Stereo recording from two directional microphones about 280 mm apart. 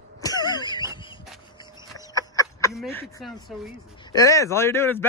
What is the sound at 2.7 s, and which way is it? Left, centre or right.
Speech, centre.